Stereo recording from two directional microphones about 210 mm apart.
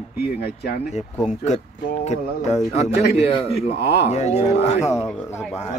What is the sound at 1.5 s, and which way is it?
A man's voice, 35° left (ahead or behind).